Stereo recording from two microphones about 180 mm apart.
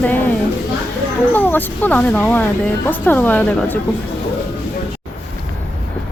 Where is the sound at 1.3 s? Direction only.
10° left (ahead or behind).